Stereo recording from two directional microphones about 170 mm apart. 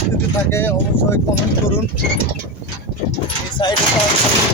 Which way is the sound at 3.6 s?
25° left (ahead or behind).